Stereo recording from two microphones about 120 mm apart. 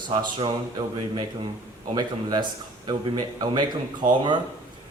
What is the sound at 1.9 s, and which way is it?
Speech, 35° right (ahead or behind).